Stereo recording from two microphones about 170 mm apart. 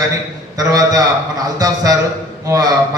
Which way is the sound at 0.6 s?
20° right (ahead or behind).